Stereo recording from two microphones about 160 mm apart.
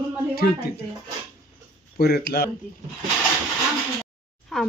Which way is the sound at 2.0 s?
90° left.